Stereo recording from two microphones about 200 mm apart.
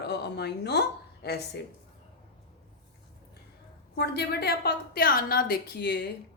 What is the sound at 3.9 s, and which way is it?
A woman's voice, 55° left (ahead or behind).